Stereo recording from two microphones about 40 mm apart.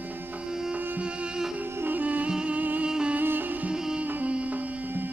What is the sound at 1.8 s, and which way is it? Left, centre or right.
Music, right.